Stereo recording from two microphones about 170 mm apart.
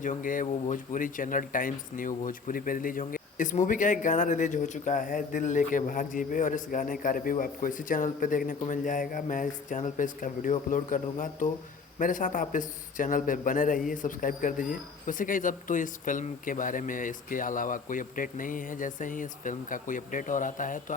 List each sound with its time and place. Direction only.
0.0 s speech: 50° left (ahead or behind)